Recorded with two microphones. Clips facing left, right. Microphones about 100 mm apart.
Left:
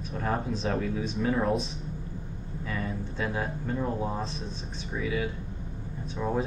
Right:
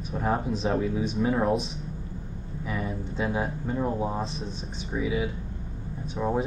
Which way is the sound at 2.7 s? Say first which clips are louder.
Right 2 dB; 15° right (ahead or behind).